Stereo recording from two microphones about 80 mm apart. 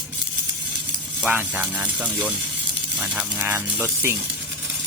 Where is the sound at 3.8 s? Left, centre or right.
Right.